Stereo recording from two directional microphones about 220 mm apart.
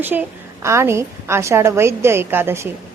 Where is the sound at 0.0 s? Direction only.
10° right (ahead or behind).